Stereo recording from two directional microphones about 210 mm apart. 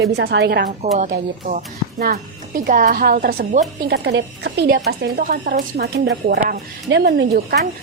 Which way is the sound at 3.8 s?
55° right (ahead or behind).